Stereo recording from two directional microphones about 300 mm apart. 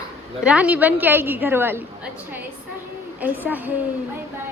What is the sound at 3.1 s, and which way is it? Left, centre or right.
Speech, centre.